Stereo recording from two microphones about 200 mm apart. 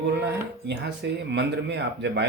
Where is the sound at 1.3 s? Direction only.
55° right (ahead or behind).